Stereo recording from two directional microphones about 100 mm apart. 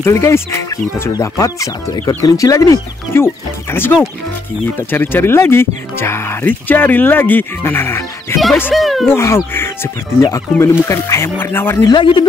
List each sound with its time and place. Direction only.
0.0 s speech: 25° left (ahead or behind)
8.7 s speech: centre (ahead or behind)
9.1 s speech: 25° left (ahead or behind)
11.9 s speech: 50° left (ahead or behind)